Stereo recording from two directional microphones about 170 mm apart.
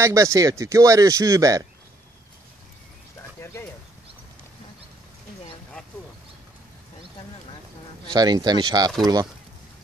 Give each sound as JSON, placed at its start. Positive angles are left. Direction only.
{"t": 0.0, "sound": "speech", "side_deg": -20}
{"t": 8.1, "sound": "speech", "side_deg": -25}